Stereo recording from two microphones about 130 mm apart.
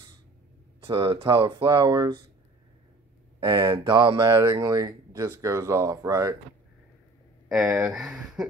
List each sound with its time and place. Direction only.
0.8 s speech: 40° right (ahead or behind)
3.3 s speech: 35° right (ahead or behind)
8.0 s speech: 5° right (ahead or behind)